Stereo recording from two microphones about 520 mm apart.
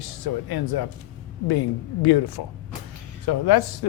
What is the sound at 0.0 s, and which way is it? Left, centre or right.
Speech, left.